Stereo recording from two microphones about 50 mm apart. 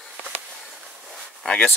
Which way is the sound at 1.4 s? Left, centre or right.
Left.